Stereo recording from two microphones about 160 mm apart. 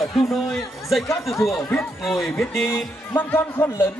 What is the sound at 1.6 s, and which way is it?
Speech, 5° left (ahead or behind).